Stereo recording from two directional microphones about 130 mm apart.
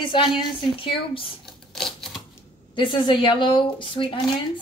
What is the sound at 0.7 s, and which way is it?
Speech, 40° left (ahead or behind).